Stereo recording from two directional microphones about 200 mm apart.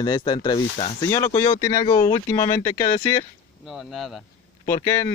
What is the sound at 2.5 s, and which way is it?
Speech, 40° left (ahead or behind).